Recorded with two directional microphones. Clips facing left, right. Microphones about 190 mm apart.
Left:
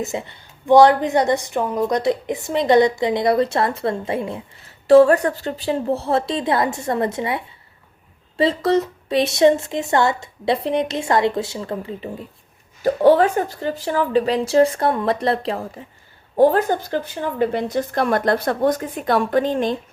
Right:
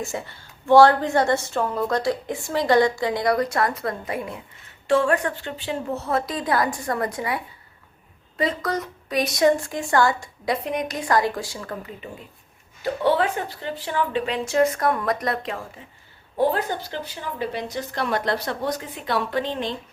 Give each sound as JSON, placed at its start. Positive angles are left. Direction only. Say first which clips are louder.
{"t": 0.0, "sound": "a woman's voice", "louder": "left 4 dB", "side_deg": 20}
{"t": 12.8, "sound": "a woman's voice", "louder": "left 7 dB", "side_deg": 45}
{"t": 16.4, "sound": "a woman's voice", "louder": "left 7 dB", "side_deg": 45}